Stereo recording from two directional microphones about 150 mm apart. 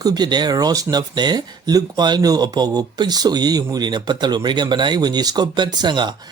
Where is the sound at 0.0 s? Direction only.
25° right (ahead or behind).